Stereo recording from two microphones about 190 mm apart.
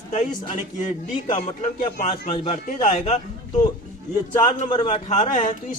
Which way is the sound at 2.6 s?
40° left (ahead or behind).